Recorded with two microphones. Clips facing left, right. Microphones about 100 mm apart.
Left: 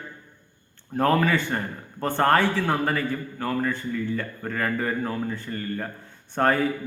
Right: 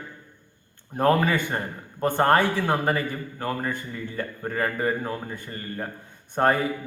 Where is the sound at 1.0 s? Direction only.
20° right (ahead or behind).